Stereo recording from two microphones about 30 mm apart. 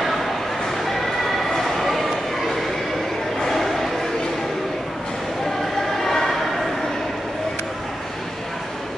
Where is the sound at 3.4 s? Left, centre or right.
Centre.